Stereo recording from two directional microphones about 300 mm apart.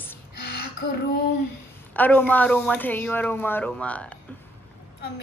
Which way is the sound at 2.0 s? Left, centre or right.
Centre.